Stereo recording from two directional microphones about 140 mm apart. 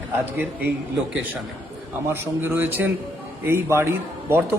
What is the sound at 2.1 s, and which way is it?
A man's voice, 15° right (ahead or behind).